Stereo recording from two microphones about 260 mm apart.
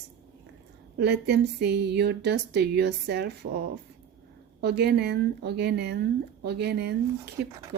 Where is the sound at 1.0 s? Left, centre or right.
Right.